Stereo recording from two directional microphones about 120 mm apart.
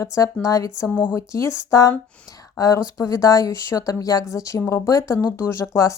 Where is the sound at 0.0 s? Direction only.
25° left (ahead or behind).